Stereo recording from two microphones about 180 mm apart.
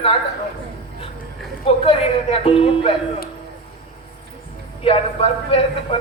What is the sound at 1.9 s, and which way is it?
A man's voice, 30° left (ahead or behind).